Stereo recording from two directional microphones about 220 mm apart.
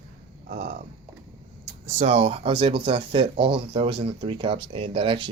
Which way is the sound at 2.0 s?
30° right (ahead or behind).